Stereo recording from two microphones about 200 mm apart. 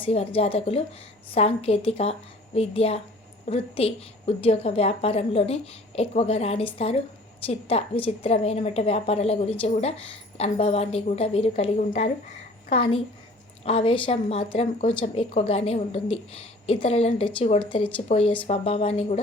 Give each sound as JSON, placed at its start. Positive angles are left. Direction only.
{"t": 0.0, "sound": "a woman's voice", "side_deg": 30}